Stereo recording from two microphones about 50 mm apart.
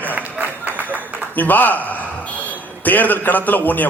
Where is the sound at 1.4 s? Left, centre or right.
Left.